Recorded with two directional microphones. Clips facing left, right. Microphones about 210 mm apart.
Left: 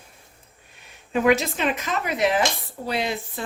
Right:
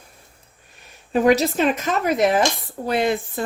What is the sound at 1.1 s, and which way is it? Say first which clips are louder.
A woman's voice: right 4 dB; 35° right (ahead or behind).